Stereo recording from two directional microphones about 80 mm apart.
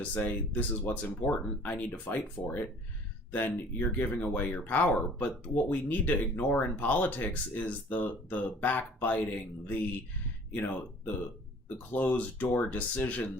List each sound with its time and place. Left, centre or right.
0.0 s speech: left